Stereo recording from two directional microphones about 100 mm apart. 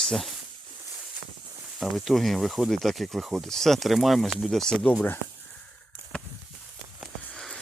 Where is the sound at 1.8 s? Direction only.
Centre (ahead or behind).